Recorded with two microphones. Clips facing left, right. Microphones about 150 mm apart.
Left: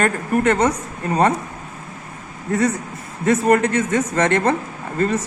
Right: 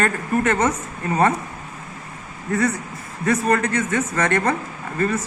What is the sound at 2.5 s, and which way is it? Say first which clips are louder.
Speech: left 2 dB; 20° left (ahead or behind).